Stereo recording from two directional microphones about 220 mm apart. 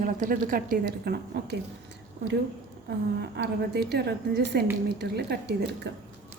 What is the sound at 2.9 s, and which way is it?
A woman's voice, 50° right (ahead or behind).